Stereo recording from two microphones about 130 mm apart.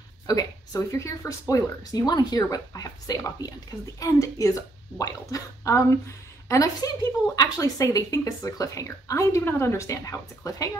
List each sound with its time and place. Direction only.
0.3 s speech: 25° left (ahead or behind)